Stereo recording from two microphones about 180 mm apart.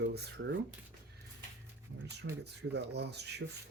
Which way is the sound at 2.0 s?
70° right (ahead or behind).